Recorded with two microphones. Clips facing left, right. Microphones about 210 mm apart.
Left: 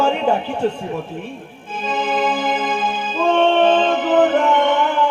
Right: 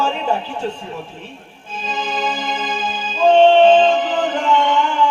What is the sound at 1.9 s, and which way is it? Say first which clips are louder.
Music: left 4 dB; 55° left (ahead or behind).